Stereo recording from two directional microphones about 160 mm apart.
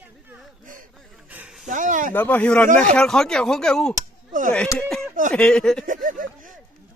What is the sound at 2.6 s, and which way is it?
Speech, 55° right (ahead or behind).